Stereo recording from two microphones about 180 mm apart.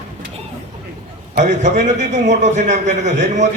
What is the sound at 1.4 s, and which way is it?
A man's voice, 40° right (ahead or behind).